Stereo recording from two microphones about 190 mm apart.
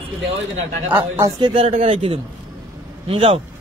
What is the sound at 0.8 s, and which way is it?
Speech, 10° right (ahead or behind).